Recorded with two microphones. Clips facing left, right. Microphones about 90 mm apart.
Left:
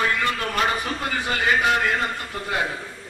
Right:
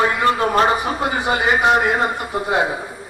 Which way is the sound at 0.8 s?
20° right (ahead or behind).